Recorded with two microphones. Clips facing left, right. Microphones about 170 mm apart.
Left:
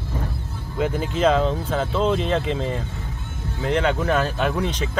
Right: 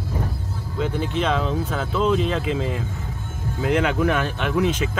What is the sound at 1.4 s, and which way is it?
Speech, 30° left (ahead or behind).